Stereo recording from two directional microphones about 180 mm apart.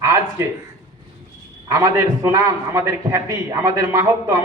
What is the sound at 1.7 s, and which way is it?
A man's voice, 15° right (ahead or behind).